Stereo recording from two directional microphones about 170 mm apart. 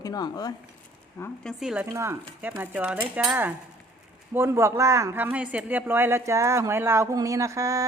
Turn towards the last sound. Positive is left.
turn(degrees=-20)  # may be behind; listen again after turning